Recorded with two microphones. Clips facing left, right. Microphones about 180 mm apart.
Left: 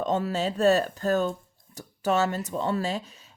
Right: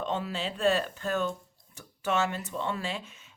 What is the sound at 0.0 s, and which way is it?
Speech, 40° left (ahead or behind).